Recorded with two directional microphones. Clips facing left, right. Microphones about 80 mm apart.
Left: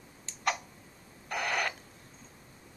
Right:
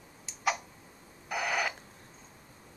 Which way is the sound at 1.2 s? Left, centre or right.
Centre.